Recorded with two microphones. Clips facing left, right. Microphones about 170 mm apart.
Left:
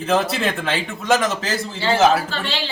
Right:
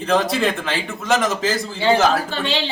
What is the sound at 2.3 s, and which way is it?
Speech, 20° right (ahead or behind).